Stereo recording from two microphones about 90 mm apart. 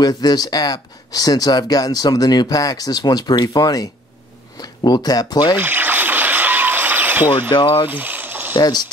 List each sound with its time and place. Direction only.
0.0 s speech: 45° left (ahead or behind)
5.6 s a sound: 20° right (ahead or behind)
7.4 s speech: 65° left (ahead or behind)
7.9 s boiling: 20° right (ahead or behind)
8.5 s speech: 50° left (ahead or behind)